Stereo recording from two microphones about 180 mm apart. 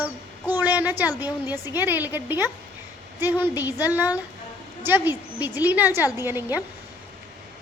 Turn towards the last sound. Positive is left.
turn(degrees=-10)  # may be behind; listen again after turning